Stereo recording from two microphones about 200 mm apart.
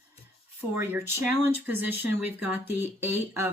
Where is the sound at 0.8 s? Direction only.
10° right (ahead or behind).